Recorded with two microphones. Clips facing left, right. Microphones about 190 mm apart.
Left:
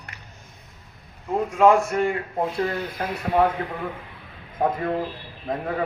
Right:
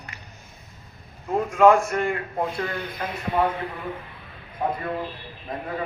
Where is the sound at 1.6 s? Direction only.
5° left (ahead or behind).